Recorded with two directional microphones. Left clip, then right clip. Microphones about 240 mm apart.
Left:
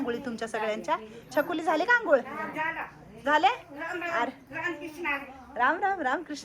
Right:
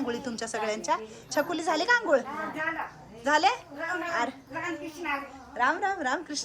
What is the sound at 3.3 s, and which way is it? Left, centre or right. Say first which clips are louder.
Speech: even; centre.